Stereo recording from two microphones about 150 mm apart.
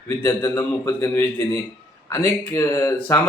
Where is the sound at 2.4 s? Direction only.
15° left (ahead or behind).